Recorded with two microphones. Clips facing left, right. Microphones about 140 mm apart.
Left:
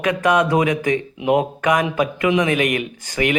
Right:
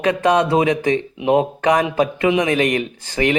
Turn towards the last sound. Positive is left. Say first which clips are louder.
# right 2 dB
turn(degrees=-30)  # may be behind; listen again after turning